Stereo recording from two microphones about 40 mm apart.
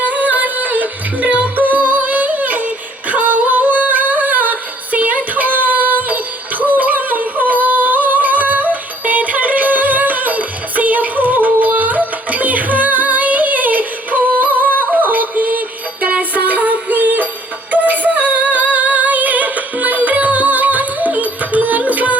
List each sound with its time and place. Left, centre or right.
0.0 s music: right
3.1 s singing: right
6.6 s music: right
17.7 s female singing: right